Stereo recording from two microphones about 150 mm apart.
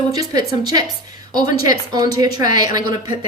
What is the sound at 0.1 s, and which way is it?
A woman's voice, 25° right (ahead or behind).